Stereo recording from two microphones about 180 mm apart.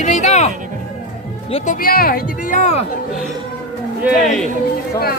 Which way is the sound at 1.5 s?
45° left (ahead or behind).